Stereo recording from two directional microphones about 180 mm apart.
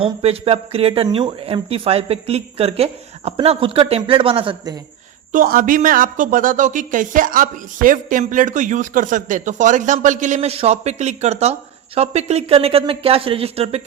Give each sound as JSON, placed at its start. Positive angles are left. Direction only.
{"t": 0.0, "sound": "speech", "side_deg": -35}
{"t": 5.3, "sound": "speech", "side_deg": -50}